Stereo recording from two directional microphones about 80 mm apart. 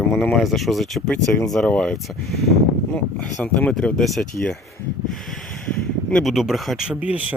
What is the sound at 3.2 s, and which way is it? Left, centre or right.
Speech, centre.